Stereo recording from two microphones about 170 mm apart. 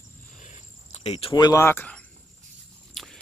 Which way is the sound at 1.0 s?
35° left (ahead or behind).